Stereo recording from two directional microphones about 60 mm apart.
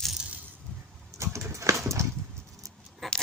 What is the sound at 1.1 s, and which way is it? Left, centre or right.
Clip-clop, right.